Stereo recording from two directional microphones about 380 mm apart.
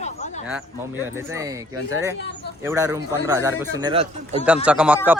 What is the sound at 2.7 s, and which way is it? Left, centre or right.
A man's voice, centre.